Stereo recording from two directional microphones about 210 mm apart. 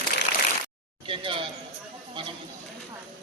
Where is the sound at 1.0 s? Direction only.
25° right (ahead or behind).